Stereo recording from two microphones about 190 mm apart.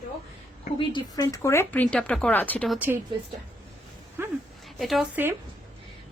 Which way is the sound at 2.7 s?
10° right (ahead or behind).